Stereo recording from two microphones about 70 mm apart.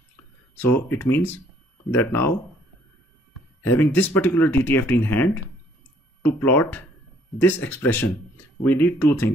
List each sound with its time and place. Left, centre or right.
0.6 s speech: left
3.7 s speech: left
6.4 s speech: left